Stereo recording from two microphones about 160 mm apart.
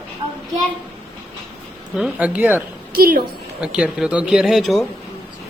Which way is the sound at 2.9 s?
65° right (ahead or behind).